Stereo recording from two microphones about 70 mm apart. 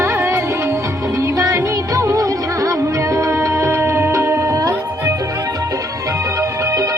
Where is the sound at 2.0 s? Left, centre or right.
Right.